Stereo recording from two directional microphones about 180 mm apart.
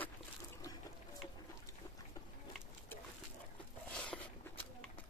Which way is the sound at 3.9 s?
5° left (ahead or behind).